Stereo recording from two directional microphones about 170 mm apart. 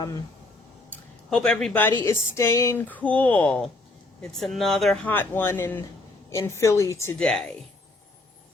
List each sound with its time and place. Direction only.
1.3 s speech: 5° left (ahead or behind)
5.1 s speech: 10° left (ahead or behind)
7.2 s speech: 5° left (ahead or behind)